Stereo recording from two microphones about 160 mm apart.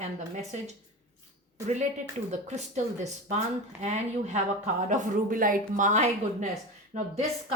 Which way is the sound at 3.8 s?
45° right (ahead or behind).